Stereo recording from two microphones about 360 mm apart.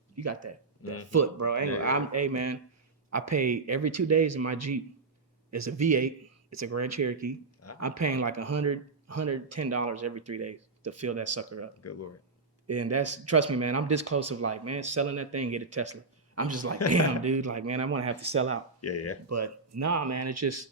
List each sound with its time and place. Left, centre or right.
0.2 s speech: right
0.8 s speech: left
1.1 s speech: right
11.8 s speech: left
12.6 s speech: right
16.8 s speech: left
17.3 s speech: right
18.0 s speech: centre
18.3 s speech: right
18.8 s speech: left
19.3 s speech: right